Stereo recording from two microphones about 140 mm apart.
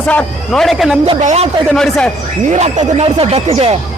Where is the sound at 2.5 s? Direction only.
55° right (ahead or behind).